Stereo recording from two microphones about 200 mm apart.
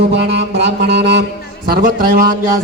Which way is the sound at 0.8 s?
60° right (ahead or behind).